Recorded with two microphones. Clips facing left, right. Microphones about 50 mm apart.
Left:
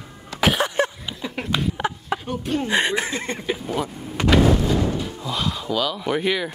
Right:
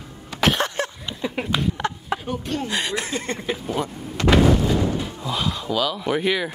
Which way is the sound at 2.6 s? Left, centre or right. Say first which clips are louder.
Left 4 dB; left.